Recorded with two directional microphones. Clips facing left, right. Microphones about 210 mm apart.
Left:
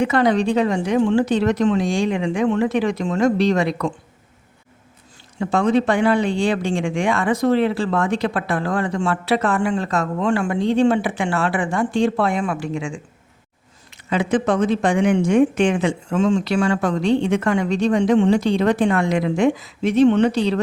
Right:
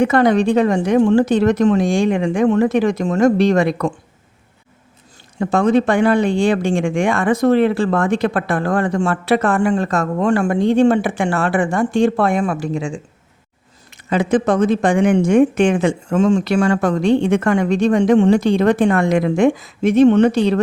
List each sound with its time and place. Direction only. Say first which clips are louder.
0.0 s speech: right 4 dB; 50° right (ahead or behind)
5.4 s speech: right 3 dB; 45° right (ahead or behind)